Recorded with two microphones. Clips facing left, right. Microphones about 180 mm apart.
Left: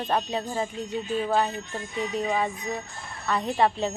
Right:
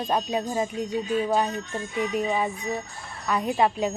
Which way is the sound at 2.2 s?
20° right (ahead or behind).